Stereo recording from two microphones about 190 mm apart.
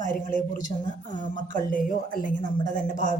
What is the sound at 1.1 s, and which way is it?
Speech, 40° right (ahead or behind).